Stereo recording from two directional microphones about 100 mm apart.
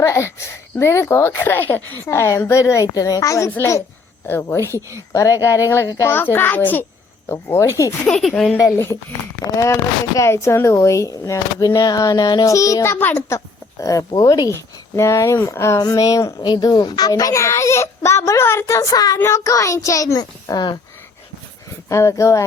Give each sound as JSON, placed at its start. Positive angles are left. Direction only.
{"t": 0.0, "sound": "speech", "side_deg": 30}
{"t": 2.0, "sound": "a child's voice", "side_deg": 30}
{"t": 8.0, "sound": "speech", "side_deg": 10}
{"t": 8.5, "sound": "a child's voice", "side_deg": 30}
{"t": 12.5, "sound": "a child's voice", "side_deg": 35}
{"t": 21.8, "sound": "a child's voice", "side_deg": 30}